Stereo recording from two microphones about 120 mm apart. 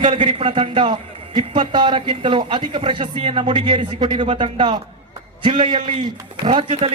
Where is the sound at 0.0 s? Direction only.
45° right (ahead or behind).